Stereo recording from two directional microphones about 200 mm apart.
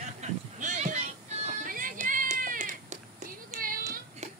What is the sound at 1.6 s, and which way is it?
Music, 40° right (ahead or behind).